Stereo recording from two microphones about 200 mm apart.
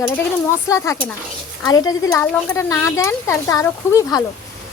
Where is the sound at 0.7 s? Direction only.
15° left (ahead or behind).